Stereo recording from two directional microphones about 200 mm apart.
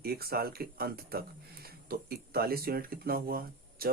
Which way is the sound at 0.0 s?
50° right (ahead or behind).